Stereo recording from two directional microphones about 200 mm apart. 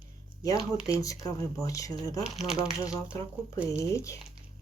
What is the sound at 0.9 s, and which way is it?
Speech, 15° left (ahead or behind).